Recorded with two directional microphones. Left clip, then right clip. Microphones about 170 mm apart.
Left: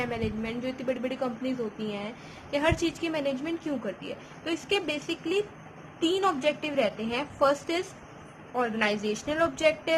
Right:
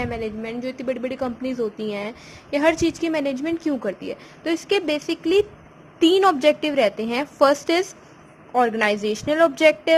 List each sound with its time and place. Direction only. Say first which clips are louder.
0.0 s a woman's voice: right 4 dB; 35° right (ahead or behind)